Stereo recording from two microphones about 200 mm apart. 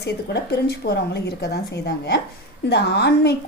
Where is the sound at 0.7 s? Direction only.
55° left (ahead or behind).